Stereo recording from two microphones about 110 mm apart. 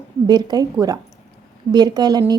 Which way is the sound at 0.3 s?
40° right (ahead or behind).